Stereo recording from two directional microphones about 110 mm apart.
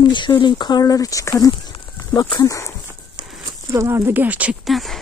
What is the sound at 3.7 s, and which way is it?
Speech, 25° right (ahead or behind).